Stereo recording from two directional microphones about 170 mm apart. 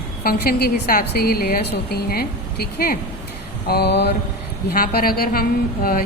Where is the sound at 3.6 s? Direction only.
70° left (ahead or behind).